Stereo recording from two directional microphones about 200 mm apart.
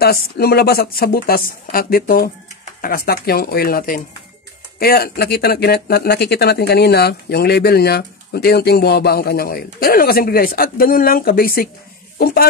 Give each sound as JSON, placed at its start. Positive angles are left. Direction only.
{"t": 0.0, "sound": "speech", "side_deg": 50}